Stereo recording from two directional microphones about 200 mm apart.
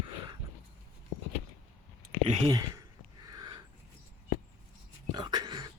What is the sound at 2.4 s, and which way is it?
Speech, 20° right (ahead or behind).